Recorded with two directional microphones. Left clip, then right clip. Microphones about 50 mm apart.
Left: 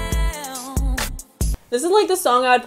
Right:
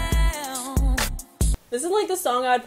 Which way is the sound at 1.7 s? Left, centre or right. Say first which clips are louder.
Left 7 dB; left.